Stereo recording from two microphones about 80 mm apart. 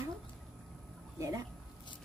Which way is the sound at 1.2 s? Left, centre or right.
Right.